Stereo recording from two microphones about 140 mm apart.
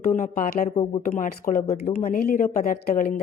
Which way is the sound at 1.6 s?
50° left (ahead or behind).